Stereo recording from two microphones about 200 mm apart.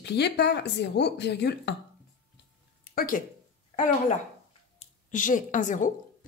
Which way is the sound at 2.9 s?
45° left (ahead or behind).